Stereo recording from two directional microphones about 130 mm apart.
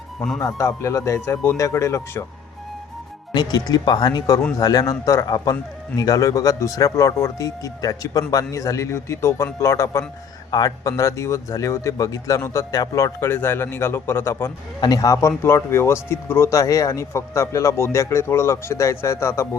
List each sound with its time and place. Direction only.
0.2 s speech: 5° left (ahead or behind)
0.4 s speech: 20° left (ahead or behind)
3.3 s speech: 30° left (ahead or behind)
14.8 s speech: 30° left (ahead or behind)